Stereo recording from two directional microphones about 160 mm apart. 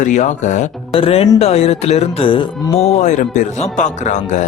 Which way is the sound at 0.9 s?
35° left (ahead or behind).